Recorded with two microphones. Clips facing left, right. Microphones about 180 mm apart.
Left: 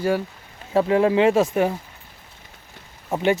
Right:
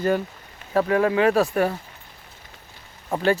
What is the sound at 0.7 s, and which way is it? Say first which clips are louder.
Speech: left 2 dB; 25° left (ahead or behind).